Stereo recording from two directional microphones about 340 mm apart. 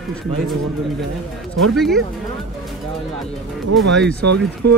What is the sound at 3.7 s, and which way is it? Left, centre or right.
Speech, centre.